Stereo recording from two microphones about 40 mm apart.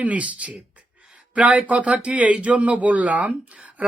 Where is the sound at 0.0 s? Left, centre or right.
Right.